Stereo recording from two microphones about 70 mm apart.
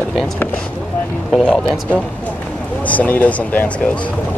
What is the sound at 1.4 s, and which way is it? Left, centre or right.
Speech, centre.